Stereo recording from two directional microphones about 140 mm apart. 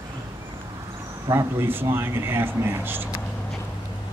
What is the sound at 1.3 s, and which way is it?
Speech, 20° right (ahead or behind).